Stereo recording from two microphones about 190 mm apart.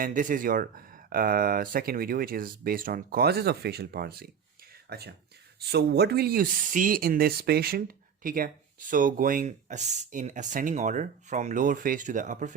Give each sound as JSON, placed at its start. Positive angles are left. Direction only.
{"t": 0.0, "sound": "speech", "side_deg": -45}